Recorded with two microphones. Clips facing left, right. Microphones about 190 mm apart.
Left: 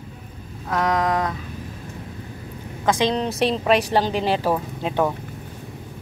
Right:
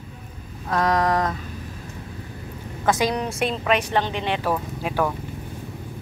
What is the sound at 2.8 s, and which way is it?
A woman's voice, 25° left (ahead or behind).